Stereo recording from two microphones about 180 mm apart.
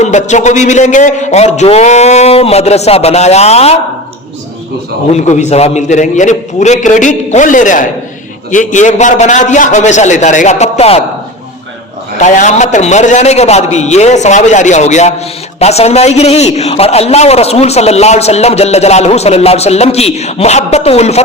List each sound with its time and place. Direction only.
0.0 s a man's voice: 40° left (ahead or behind)
5.1 s a man's voice: 40° left (ahead or behind)
12.1 s a man's voice: 40° left (ahead or behind)